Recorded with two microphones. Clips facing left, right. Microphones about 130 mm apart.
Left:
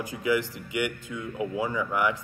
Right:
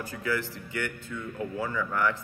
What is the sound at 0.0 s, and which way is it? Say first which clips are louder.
Speech: left 5 dB; 15° left (ahead or behind).